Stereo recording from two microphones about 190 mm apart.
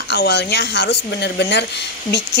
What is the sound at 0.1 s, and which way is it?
A woman's voice, 60° left (ahead or behind).